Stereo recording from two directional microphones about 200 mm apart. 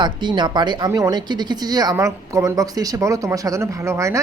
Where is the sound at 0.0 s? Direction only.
20° right (ahead or behind).